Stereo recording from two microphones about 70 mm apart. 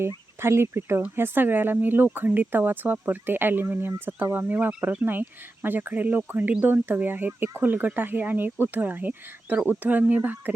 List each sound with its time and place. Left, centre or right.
0.4 s speech: right